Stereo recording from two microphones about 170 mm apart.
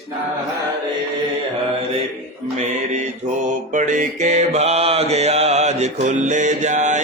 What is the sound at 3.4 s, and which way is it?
Mantra, 50° right (ahead or behind).